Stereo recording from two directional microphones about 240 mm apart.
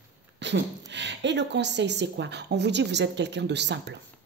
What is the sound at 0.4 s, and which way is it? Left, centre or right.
A woman's voice, right.